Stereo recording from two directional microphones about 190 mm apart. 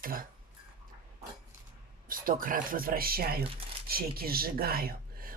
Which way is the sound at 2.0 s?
45° right (ahead or behind).